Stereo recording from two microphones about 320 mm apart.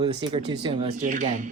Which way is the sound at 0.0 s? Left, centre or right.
Centre.